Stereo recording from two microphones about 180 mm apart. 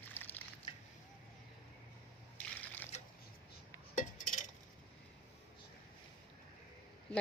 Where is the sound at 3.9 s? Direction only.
45° left (ahead or behind).